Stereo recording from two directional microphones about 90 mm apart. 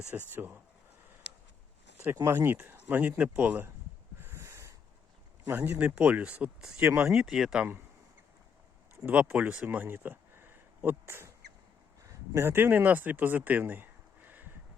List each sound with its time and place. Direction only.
0.1 s speech: 20° right (ahead or behind)
2.2 s speech: 25° right (ahead or behind)
4.2 s a sound: 30° right (ahead or behind)
5.5 s speech: 20° right (ahead or behind)
9.0 s speech: 15° right (ahead or behind)